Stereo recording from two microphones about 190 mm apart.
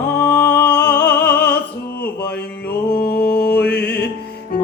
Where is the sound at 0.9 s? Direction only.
60° left (ahead or behind).